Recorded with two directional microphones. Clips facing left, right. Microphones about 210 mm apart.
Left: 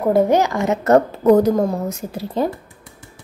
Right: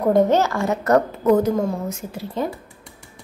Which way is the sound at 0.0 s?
10° left (ahead or behind).